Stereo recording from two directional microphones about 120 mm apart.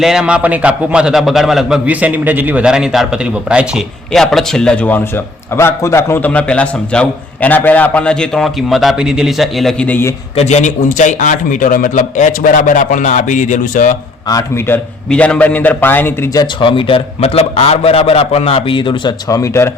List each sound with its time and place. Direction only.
0.0 s a man's voice: 5° right (ahead or behind)
9.8 s a man's voice: 15° left (ahead or behind)
10.3 s a man's voice: 70° left (ahead or behind); by 13.9 s 90° left
14.3 s speech: 30° left (ahead or behind)
15.1 s a man's voice: 10° left (ahead or behind)
16.3 s speech: 35° left (ahead or behind)
16.6 s a man's voice: 45° left (ahead or behind)
19.3 s speech: 25° left (ahead or behind)